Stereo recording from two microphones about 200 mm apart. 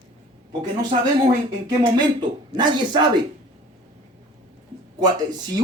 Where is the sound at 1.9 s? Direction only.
20° right (ahead or behind).